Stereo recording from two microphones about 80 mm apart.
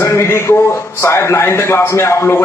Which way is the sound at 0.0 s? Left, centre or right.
Left.